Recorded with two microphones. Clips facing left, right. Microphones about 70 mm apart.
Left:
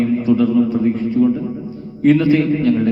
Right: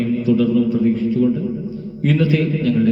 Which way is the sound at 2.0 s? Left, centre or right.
Left.